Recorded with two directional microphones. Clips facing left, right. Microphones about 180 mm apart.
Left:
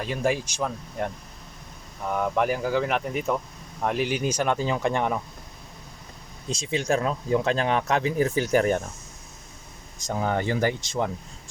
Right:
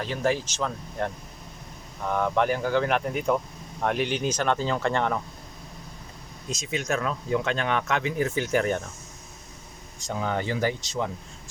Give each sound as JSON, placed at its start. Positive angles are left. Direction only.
{"t": 0.0, "sound": "speech", "side_deg": 10}
{"t": 6.5, "sound": "speech", "side_deg": 30}
{"t": 10.0, "sound": "speech", "side_deg": 40}